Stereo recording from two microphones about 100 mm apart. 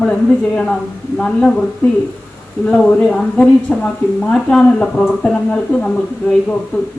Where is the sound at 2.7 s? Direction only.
10° left (ahead or behind).